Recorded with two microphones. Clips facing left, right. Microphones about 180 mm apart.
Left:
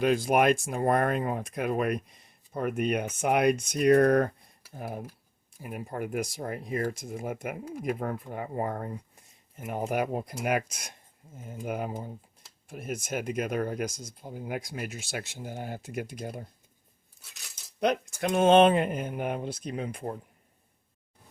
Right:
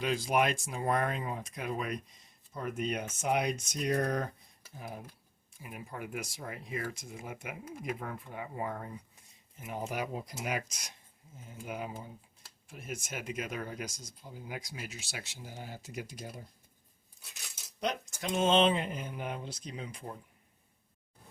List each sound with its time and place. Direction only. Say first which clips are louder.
0.0 s speech: left 6 dB; 55° left (ahead or behind)
17.7 s speech: left 8 dB; 60° left (ahead or behind)